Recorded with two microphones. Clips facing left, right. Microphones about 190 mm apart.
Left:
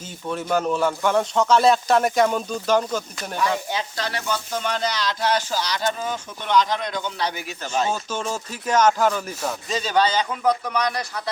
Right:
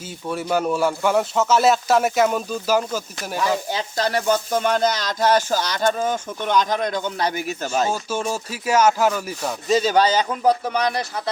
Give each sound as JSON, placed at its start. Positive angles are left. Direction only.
{"t": 0.3, "sound": "speech", "side_deg": -10}
{"t": 3.7, "sound": "speech", "side_deg": -40}
{"t": 7.9, "sound": "speech", "side_deg": -10}
{"t": 9.9, "sound": "speech", "side_deg": -40}